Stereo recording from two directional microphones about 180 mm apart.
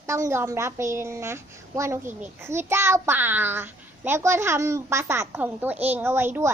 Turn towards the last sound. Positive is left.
turn(degrees=-15)  # may be behind; listen again after turning